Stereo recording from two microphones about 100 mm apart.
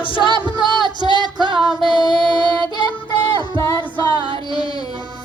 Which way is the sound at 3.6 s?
30° left (ahead or behind).